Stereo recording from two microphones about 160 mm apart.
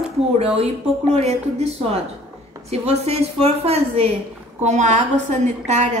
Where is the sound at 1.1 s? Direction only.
40° right (ahead or behind).